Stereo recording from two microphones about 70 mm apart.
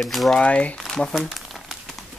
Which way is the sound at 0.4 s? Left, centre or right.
Centre.